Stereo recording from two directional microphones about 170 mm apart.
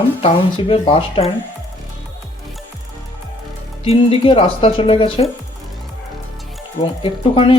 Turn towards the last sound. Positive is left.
turn(degrees=35)  # may be behind; listen again after turning